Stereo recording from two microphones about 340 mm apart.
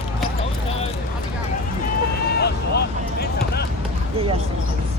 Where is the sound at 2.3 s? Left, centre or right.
Left.